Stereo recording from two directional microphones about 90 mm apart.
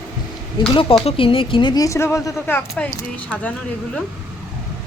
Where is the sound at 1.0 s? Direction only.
85° left; by 1.7 s 70° left (ahead or behind).